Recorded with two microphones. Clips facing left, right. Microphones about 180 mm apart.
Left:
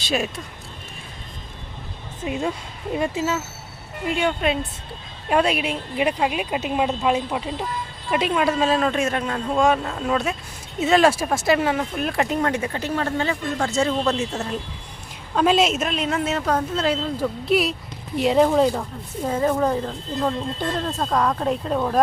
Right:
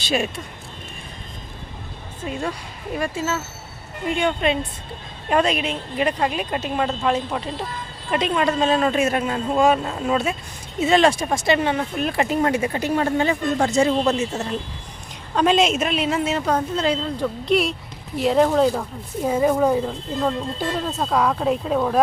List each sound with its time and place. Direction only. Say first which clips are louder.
0.0 s speech: right 1 dB; centre (ahead or behind)
2.2 s speech: left 2 dB; 15° left (ahead or behind)
4.1 s speech: right 1 dB; 5° left (ahead or behind)
19.2 s speech: right 2 dB; 10° right (ahead or behind)